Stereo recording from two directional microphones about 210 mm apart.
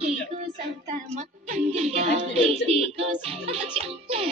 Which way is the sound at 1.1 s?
30° right (ahead or behind).